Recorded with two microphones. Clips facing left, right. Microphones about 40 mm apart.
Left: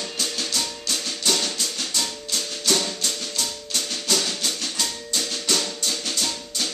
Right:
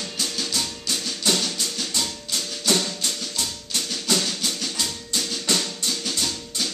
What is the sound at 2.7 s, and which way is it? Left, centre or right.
Music, centre.